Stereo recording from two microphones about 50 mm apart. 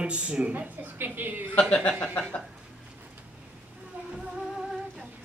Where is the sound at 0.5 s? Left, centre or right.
Right.